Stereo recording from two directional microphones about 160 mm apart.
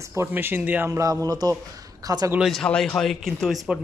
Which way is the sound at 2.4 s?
5° left (ahead or behind).